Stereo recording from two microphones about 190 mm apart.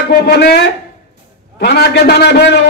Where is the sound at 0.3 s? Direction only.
55° left (ahead or behind).